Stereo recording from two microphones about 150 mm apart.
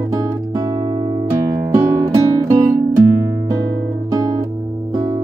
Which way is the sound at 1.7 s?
25° right (ahead or behind).